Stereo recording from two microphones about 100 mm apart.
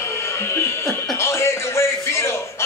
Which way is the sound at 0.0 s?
25° left (ahead or behind).